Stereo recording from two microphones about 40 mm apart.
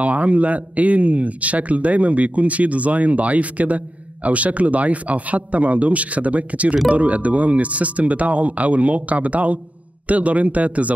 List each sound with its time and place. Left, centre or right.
0.0 s a man's voice: right